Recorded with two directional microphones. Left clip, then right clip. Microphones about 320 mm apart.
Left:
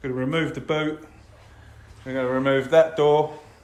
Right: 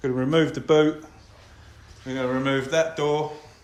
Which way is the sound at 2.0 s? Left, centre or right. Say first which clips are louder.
Left 3 dB; centre.